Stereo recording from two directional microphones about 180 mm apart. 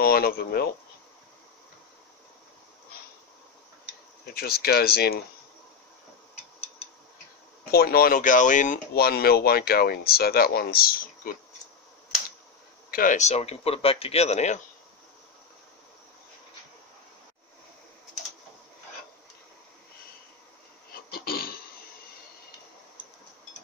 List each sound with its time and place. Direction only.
0.0 s speech: 60° left (ahead or behind)
4.3 s speech: 55° left (ahead or behind)
7.7 s speech: 55° left (ahead or behind)
12.9 s speech: 45° left (ahead or behind)
21.1 s a sound: 55° left (ahead or behind)